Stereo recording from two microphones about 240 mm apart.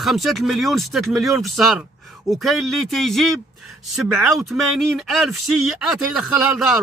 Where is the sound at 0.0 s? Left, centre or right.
Centre.